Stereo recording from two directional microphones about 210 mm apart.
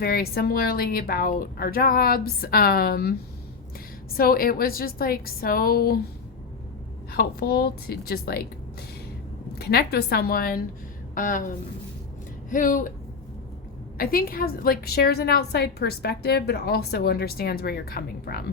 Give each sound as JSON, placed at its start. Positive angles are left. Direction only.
{"t": 0.0, "sound": "a woman's voice", "side_deg": 50}
{"t": 7.1, "sound": "a woman's voice", "side_deg": 50}
{"t": 9.6, "sound": "a woman's voice", "side_deg": 50}
{"t": 14.0, "sound": "a woman's voice", "side_deg": 45}